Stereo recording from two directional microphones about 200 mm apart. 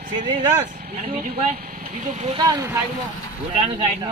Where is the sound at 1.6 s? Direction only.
45° right (ahead or behind).